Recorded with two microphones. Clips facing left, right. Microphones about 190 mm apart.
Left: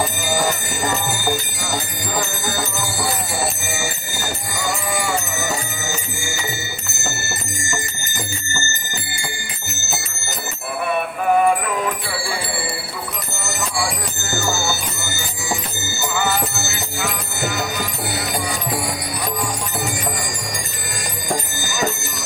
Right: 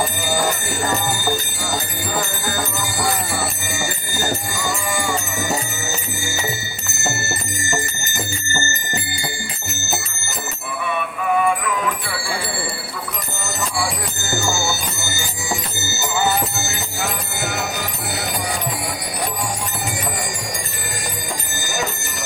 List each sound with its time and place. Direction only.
4.6 s sheep: 65° left (ahead or behind)
10.8 s music: 45° left (ahead or behind)